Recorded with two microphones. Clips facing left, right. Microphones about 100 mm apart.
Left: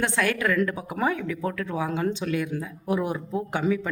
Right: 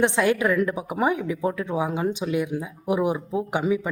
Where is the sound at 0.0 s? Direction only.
20° right (ahead or behind).